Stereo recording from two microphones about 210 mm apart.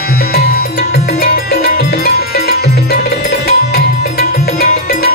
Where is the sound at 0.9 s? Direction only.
45° left (ahead or behind).